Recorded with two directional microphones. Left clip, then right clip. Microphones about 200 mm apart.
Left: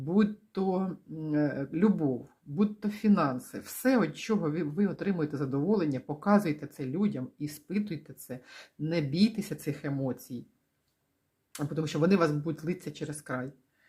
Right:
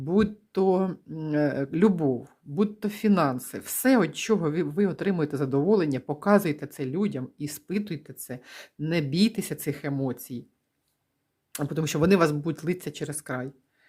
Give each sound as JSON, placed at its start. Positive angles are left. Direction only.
{"t": 0.0, "sound": "speech", "side_deg": -30}
{"t": 11.5, "sound": "speech", "side_deg": -35}